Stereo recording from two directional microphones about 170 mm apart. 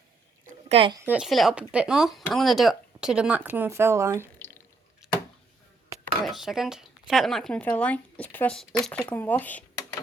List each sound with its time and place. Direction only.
0.7 s speech: 35° right (ahead or behind)
0.9 s speech: 10° right (ahead or behind)
4.4 s drip: 10° left (ahead or behind)
5.0 s a sound: 5° right (ahead or behind)
6.2 s speech: centre (ahead or behind)